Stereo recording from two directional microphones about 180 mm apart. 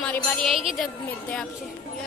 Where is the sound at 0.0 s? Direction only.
5° left (ahead or behind).